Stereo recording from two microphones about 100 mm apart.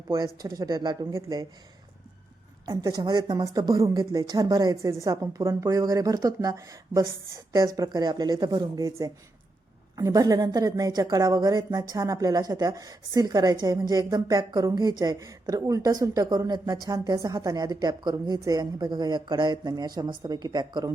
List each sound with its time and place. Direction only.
0.1 s a woman's voice: 40° right (ahead or behind)
2.6 s a woman's voice: 40° right (ahead or behind)